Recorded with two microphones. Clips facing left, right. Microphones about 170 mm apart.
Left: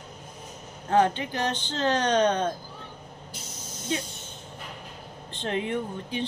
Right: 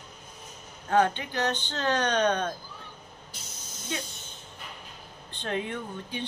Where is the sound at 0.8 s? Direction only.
30° left (ahead or behind).